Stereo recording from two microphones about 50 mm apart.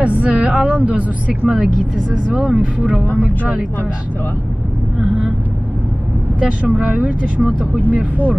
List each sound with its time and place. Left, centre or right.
0.0 s a woman's voice: right
6.4 s a woman's voice: right